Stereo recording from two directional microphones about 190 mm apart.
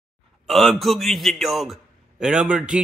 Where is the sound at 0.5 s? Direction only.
Centre (ahead or behind).